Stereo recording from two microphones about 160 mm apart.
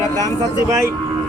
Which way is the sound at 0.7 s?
15° right (ahead or behind).